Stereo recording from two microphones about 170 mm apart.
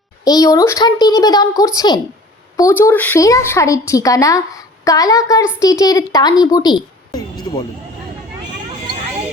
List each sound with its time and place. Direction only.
0.3 s a woman's voice: 20° left (ahead or behind)